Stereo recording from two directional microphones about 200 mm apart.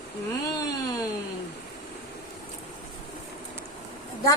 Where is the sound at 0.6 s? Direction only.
20° left (ahead or behind).